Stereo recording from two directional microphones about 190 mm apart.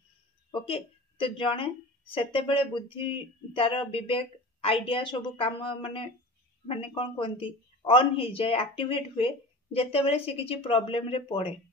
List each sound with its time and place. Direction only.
0.5 s speech: 30° left (ahead or behind)